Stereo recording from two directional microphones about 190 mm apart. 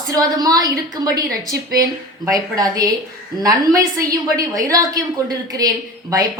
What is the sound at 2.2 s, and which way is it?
A woman's voice, 20° right (ahead or behind).